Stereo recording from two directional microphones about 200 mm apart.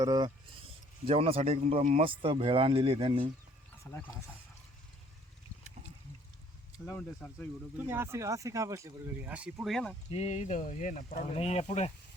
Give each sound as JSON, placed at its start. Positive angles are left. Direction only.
{"t": 0.0, "sound": "speech", "side_deg": -20}
{"t": 1.0, "sound": "speech", "side_deg": -30}
{"t": 3.9, "sound": "speech", "side_deg": 10}
{"t": 6.8, "sound": "speech", "side_deg": 5}
{"t": 7.8, "sound": "speech", "side_deg": -10}
{"t": 10.1, "sound": "speech", "side_deg": 30}